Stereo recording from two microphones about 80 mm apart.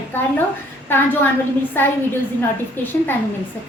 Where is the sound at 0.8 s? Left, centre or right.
Left.